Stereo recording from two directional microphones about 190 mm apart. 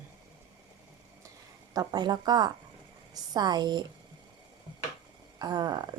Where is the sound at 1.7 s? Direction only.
20° right (ahead or behind).